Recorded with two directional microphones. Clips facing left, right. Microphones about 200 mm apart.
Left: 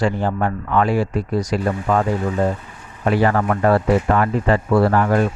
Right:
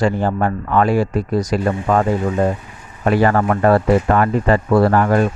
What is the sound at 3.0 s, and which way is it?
Speech, 50° right (ahead or behind).